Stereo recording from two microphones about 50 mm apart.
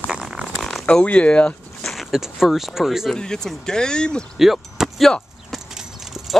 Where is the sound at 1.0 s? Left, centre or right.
Left.